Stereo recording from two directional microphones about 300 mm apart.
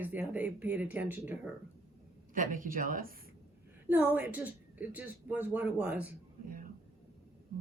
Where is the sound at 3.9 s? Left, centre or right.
Centre.